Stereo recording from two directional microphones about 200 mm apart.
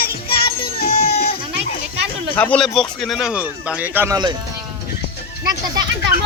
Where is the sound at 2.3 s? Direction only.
5° left (ahead or behind); by 4.4 s 20° right (ahead or behind).